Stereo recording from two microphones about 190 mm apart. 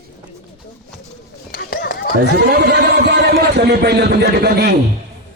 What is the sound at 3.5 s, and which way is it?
Speech, 60° right (ahead or behind).